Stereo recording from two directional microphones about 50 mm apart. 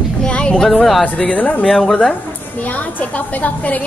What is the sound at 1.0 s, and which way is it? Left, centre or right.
A woman's voice, left.